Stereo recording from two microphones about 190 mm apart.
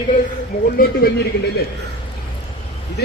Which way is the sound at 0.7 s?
55° left (ahead or behind).